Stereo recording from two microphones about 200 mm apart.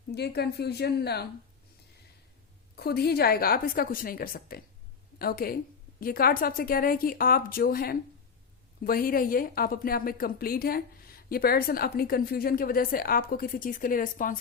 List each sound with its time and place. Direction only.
0.1 s a woman's voice: 55° left (ahead or behind)
2.7 s a woman's voice: 50° left (ahead or behind)